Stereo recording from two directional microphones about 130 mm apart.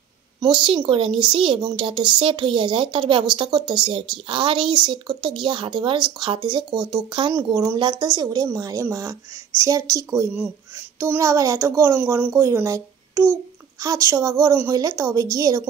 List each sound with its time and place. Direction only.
0.4 s speech: 35° right (ahead or behind)